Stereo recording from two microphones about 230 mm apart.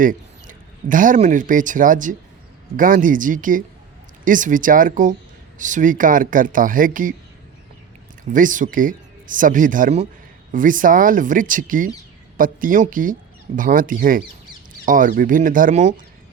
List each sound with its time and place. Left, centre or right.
0.0 s speech: right
8.2 s speech: right